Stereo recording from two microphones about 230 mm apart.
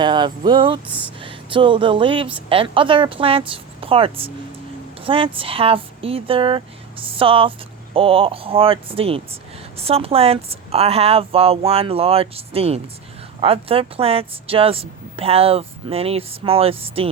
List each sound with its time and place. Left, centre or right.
0.0 s speech: centre
0.9 s speech: centre
1.2 s a woman's voice: right